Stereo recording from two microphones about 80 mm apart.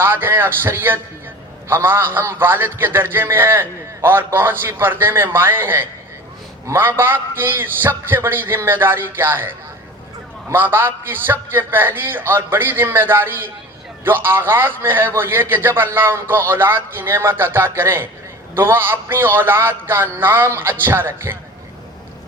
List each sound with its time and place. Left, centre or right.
0.0 s a man's voice: right
10.5 s a man's voice: right